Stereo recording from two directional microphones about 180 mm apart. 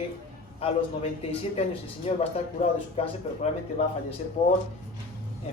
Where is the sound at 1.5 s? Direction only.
35° left (ahead or behind).